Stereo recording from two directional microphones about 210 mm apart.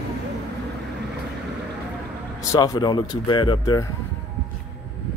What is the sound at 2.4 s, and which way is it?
Speech, 15° left (ahead or behind).